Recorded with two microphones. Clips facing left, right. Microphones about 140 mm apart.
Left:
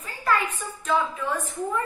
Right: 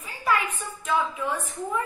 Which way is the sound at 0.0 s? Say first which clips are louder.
Left 1 dB; 10° right (ahead or behind).